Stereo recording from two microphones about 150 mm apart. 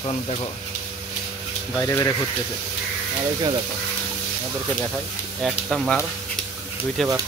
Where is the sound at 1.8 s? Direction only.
20° left (ahead or behind).